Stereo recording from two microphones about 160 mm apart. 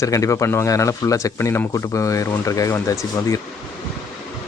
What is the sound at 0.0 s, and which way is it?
Speech, 20° left (ahead or behind).